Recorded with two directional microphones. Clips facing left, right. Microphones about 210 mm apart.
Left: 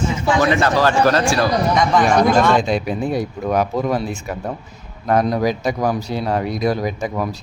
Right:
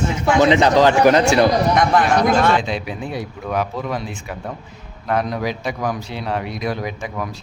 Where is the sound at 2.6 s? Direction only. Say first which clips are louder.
Left 5 dB; 45° left (ahead or behind).